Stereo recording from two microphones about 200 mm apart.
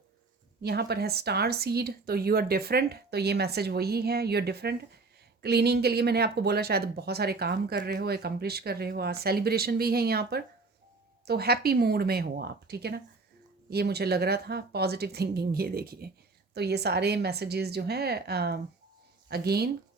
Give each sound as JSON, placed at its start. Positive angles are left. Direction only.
{"t": 0.6, "sound": "speech", "side_deg": -55}